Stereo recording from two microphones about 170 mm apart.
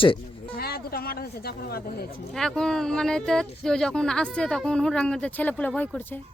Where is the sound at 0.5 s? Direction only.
65° left (ahead or behind).